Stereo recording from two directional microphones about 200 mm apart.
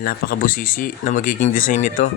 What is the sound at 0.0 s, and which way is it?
A man's voice, 45° left (ahead or behind).